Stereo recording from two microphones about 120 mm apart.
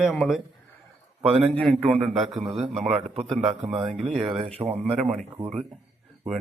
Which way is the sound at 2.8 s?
60° right (ahead or behind).